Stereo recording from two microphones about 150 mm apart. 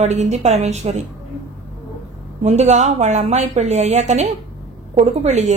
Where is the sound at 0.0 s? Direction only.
50° right (ahead or behind).